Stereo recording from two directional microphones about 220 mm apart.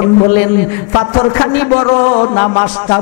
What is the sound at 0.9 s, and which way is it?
Speech, 25° left (ahead or behind).